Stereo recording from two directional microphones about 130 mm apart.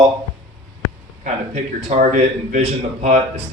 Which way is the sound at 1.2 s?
70° right (ahead or behind).